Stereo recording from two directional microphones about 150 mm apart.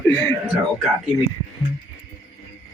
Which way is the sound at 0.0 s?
10° left (ahead or behind).